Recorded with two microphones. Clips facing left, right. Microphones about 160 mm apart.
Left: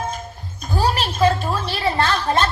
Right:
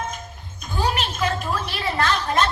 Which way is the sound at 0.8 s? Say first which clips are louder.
Left 5 dB; 35° left (ahead or behind).